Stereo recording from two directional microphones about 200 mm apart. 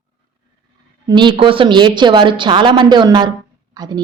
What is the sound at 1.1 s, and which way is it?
Speech, 25° right (ahead or behind).